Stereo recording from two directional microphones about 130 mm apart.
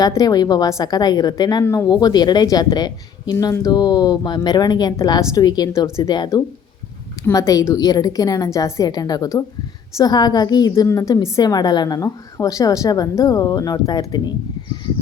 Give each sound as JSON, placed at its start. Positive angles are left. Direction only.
{"t": 0.0, "sound": "speech", "side_deg": 30}
{"t": 1.6, "sound": "a woman's voice", "side_deg": 20}
{"t": 1.9, "sound": "a woman's voice", "side_deg": 30}